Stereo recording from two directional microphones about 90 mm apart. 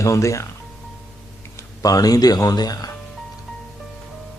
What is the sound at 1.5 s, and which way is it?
Speech, 40° left (ahead or behind).